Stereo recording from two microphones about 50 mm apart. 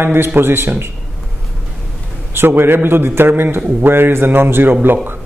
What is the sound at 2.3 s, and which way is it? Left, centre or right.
A man's voice, right.